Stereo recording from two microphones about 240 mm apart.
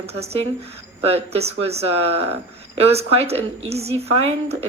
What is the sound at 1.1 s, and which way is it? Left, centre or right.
Speech, right.